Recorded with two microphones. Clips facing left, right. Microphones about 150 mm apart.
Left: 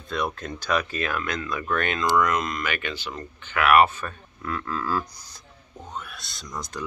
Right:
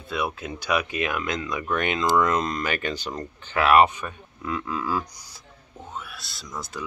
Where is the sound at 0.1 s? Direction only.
5° right (ahead or behind).